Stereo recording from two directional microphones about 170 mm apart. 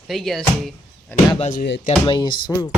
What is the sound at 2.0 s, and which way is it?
Speech, 30° left (ahead or behind).